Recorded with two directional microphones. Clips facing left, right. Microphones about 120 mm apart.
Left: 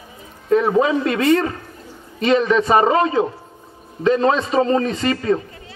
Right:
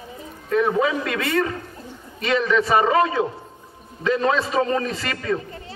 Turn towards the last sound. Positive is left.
turn(degrees=25)  # may be behind; listen again after turning